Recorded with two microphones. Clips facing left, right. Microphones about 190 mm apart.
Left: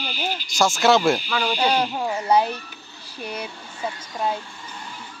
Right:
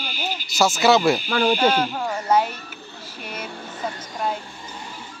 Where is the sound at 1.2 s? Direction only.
50° right (ahead or behind).